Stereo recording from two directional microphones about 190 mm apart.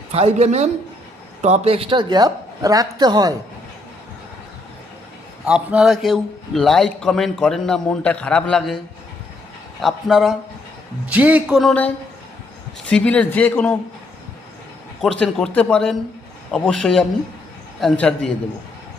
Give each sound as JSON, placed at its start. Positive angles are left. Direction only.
{"t": 0.1, "sound": "a man's voice", "side_deg": -35}
{"t": 5.5, "sound": "a man's voice", "side_deg": -5}
{"t": 9.8, "sound": "a man's voice", "side_deg": 0}
{"t": 15.2, "sound": "a man's voice", "side_deg": 5}